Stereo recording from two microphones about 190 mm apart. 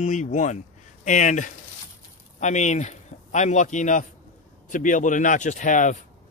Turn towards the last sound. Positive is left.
turn(degrees=40)  # may be behind; listen again after turning